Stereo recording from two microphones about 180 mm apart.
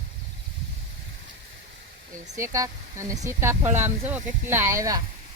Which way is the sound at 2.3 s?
15° right (ahead or behind).